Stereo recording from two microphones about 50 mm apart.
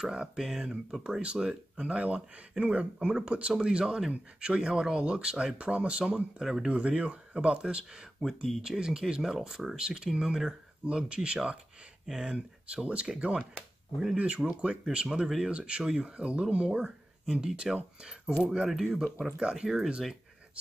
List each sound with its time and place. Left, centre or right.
0.1 s speech: centre
1.2 s speech: right
8.2 s speech: centre; by 15.2 s right
15.2 s speech: centre
15.5 s speech: right